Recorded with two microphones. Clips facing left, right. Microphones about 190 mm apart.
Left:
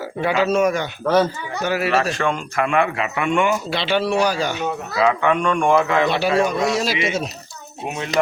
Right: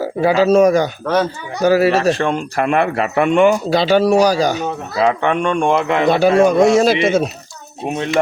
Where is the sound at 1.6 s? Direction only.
35° right (ahead or behind).